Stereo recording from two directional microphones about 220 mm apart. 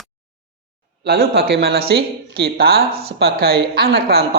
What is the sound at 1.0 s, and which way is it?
A woman's voice, 45° right (ahead or behind).